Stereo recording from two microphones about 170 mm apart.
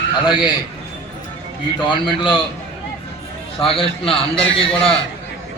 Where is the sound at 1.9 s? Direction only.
30° left (ahead or behind).